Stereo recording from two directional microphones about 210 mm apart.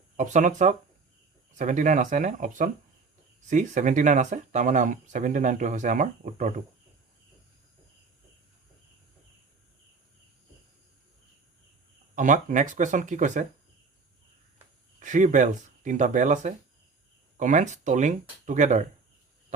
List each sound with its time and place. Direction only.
0.2 s speech: 35° right (ahead or behind)
12.1 s speech: 35° right (ahead or behind)
14.9 s speech: 35° right (ahead or behind)